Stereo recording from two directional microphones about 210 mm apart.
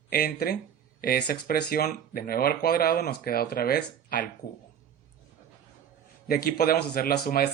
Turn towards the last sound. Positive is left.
turn(degrees=45)  # may be behind; listen again after turning